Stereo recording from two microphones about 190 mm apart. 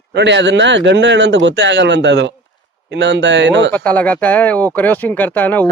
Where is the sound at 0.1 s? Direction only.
65° right (ahead or behind).